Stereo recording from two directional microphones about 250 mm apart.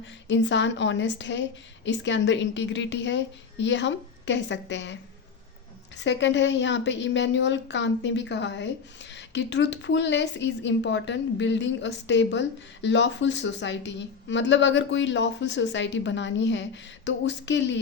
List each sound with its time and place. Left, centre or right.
0.0 s a woman's voice: left
6.0 s a woman's voice: left